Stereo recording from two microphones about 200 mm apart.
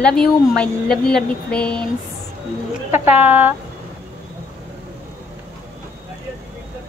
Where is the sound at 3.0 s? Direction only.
10° right (ahead or behind).